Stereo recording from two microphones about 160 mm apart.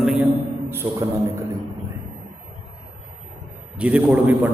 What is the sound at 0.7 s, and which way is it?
Speech, 15° right (ahead or behind).